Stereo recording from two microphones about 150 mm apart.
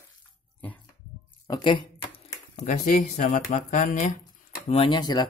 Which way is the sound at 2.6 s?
70° left (ahead or behind).